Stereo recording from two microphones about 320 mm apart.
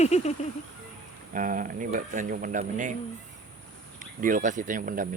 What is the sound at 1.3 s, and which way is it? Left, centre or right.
Speech, right.